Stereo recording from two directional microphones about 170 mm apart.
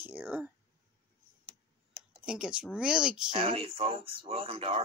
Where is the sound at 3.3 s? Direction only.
35° right (ahead or behind).